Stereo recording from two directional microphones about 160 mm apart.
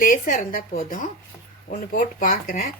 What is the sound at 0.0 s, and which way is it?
A woman's voice, 55° left (ahead or behind).